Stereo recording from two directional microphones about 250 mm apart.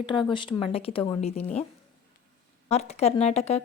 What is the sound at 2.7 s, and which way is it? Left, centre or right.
Speech, left.